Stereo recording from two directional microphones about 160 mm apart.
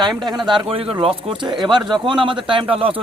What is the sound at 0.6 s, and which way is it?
Speech, 35° right (ahead or behind).